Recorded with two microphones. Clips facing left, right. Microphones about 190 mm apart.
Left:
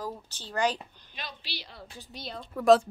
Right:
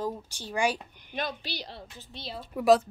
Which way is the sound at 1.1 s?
50° right (ahead or behind).